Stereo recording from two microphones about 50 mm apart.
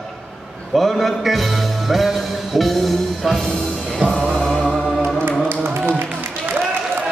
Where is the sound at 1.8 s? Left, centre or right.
Centre.